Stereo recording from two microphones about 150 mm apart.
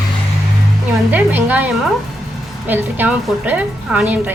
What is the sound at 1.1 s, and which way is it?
Speech, 10° right (ahead or behind).